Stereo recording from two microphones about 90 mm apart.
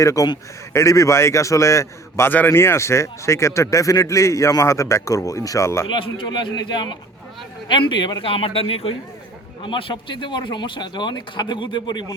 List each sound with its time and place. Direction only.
0.0 s speech: 35° left (ahead or behind)
5.9 s speech: 65° left (ahead or behind); by 8.9 s 90° left
9.6 s speech: 70° left (ahead or behind)